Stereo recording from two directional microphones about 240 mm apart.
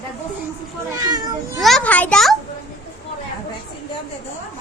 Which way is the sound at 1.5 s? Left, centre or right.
Centre.